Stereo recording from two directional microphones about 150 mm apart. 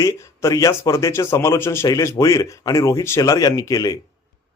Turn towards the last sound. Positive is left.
turn(degrees=25)  # may be behind; listen again after turning